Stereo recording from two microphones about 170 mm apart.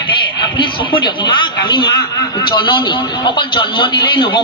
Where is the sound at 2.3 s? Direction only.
25° left (ahead or behind).